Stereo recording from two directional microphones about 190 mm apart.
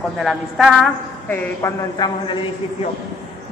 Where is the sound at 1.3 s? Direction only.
20° left (ahead or behind).